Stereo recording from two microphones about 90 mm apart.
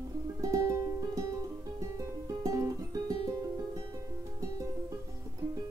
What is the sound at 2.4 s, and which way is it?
Music, 40° right (ahead or behind).